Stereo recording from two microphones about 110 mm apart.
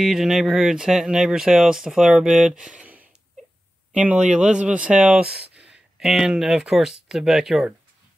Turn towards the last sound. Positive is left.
turn(degrees=-5)  # may be behind; listen again after turning